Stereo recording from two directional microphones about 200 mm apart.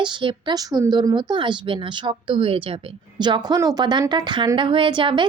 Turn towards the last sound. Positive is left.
turn(degrees=-25)  # may be behind; listen again after turning